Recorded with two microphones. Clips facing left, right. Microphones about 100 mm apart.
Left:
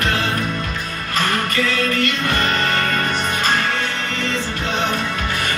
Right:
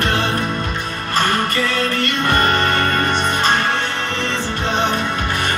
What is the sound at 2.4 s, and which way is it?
Music, 50° right (ahead or behind).